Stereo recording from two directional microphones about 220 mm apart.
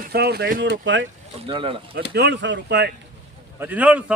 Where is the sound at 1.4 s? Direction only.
25° right (ahead or behind).